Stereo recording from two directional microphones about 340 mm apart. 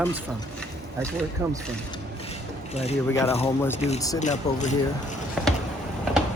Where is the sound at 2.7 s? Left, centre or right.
Centre.